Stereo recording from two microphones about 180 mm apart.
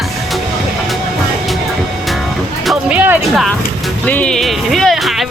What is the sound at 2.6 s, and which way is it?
Music, 10° right (ahead or behind).